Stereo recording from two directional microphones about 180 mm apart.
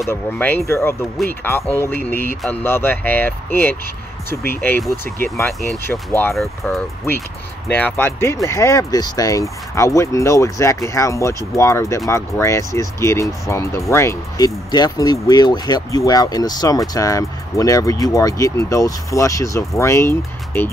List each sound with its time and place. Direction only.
0.0 s speech: 10° left (ahead or behind)
6.3 s speech: centre (ahead or behind)